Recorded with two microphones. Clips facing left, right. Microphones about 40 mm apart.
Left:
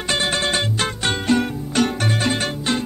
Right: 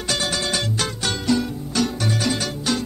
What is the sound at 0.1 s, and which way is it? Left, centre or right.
Music, left.